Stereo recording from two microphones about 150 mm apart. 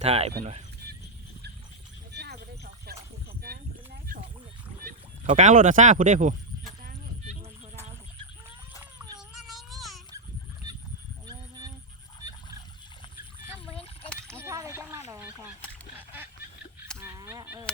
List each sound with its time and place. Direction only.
0.0 s speech: 45° right (ahead or behind)
2.1 s a sound: 90° right
4.1 s roaring cats: 65° right (ahead or behind)
4.8 s speech: 65° right (ahead or behind)
9.3 s cat: centre (ahead or behind)
11.3 s honk: 25° right (ahead or behind)
14.1 s a sound: 5° left (ahead or behind)
14.3 s a sound: 20° right (ahead or behind)
17.0 s fowl: 15° right (ahead or behind)